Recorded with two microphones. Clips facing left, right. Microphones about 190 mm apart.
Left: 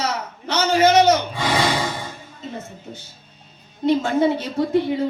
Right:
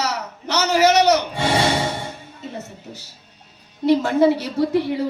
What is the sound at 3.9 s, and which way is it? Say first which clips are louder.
Speech: right 2 dB; 65° right (ahead or behind).